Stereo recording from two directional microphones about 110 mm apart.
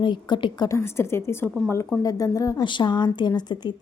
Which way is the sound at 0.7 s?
25° left (ahead or behind).